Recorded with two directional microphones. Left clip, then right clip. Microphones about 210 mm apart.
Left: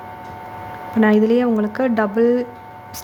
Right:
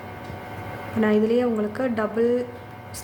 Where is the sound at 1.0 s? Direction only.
35° left (ahead or behind).